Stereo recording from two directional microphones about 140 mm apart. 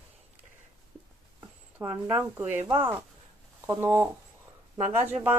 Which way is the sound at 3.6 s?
15° right (ahead or behind).